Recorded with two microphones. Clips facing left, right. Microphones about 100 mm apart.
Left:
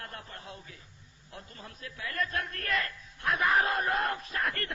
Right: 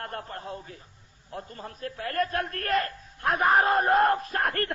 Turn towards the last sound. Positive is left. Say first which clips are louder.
# right 6 dB
turn(degrees=-50)  # may be behind; listen again after turning